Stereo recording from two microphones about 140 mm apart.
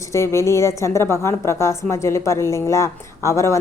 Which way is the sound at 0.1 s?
20° left (ahead or behind).